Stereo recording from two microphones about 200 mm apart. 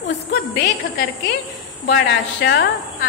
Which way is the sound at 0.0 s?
60° left (ahead or behind).